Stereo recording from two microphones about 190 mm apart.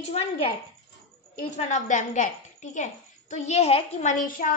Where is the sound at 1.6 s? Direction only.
40° left (ahead or behind).